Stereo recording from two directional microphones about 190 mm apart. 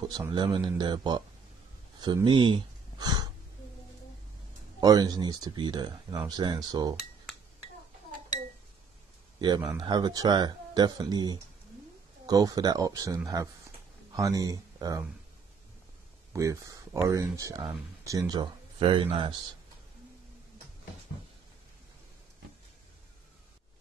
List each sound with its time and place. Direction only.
0.1 s speech: 25° right (ahead or behind)
2.0 s a sound: 25° right (ahead or behind)
4.7 s speech: 20° right (ahead or behind)
9.4 s speech: 25° right (ahead or behind)
16.3 s speech: 15° right (ahead or behind)